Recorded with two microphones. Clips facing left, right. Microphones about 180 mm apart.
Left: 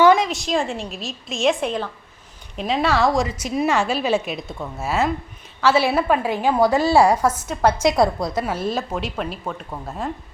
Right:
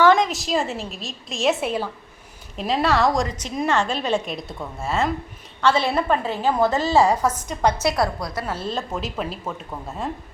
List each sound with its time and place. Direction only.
0.2 s a woman's voice: centre (ahead or behind)
7.9 s a woman's voice: 25° left (ahead or behind)
8.4 s a woman's voice: 10° left (ahead or behind)
8.9 s a woman's voice: centre (ahead or behind)